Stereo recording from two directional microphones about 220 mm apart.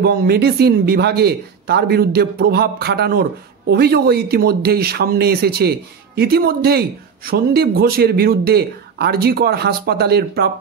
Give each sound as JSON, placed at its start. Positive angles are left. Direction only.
{"t": 0.0, "sound": "speech", "side_deg": -45}